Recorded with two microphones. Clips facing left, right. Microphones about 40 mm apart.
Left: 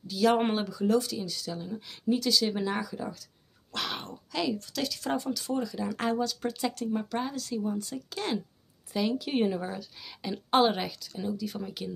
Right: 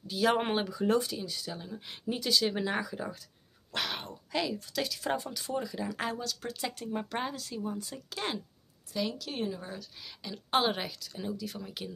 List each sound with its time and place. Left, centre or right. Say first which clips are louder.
0.1 s speech: left 3 dB; centre
3.7 s speech: left 1 dB; centre
6.7 s speech: left 4 dB; centre
8.9 s a sound: left 3 dB; left
9.2 s speech: left 8 dB; left
9.8 s speech: left 4 dB; centre